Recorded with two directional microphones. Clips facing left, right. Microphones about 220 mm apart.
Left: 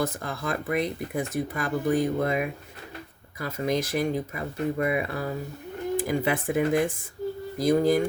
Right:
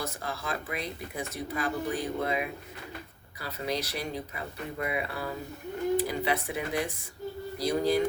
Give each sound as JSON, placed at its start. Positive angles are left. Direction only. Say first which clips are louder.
{"t": 0.0, "sound": "speech", "louder": "left 6 dB", "side_deg": 50}